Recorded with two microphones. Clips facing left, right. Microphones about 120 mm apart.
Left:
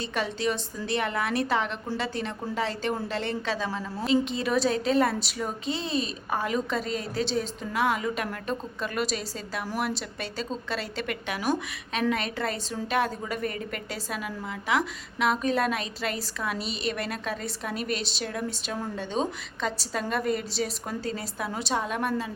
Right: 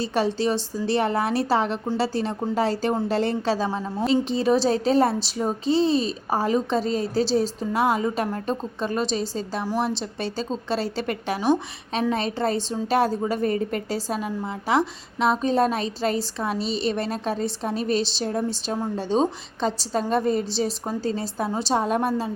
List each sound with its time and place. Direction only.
0.0 s a woman's voice: 35° right (ahead or behind)